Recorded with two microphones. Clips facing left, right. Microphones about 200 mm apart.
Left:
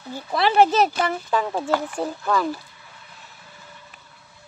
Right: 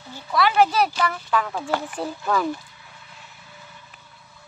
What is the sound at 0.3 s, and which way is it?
Speech, 30° left (ahead or behind).